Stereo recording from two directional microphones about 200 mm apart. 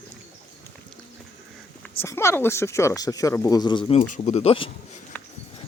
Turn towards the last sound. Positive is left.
turn(degrees=30)  # may be behind; listen again after turning